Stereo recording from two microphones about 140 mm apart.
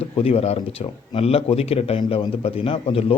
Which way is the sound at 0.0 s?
45° left (ahead or behind).